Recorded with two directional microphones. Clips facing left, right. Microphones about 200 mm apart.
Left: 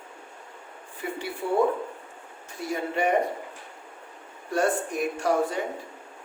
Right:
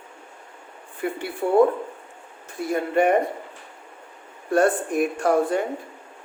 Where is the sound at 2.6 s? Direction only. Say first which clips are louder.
Right 6 dB; 55° right (ahead or behind).